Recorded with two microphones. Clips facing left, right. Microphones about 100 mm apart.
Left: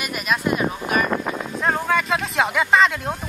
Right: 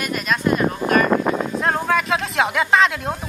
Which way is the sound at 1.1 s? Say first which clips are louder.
Right 6 dB; 65° right (ahead or behind).